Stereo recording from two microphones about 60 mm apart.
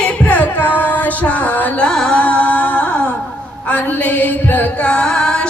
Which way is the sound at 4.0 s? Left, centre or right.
Left.